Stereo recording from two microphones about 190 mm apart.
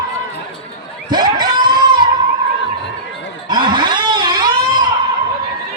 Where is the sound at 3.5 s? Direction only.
25° right (ahead or behind).